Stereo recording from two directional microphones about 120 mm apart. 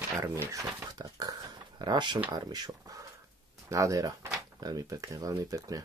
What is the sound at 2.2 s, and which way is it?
Speech, 35° right (ahead or behind).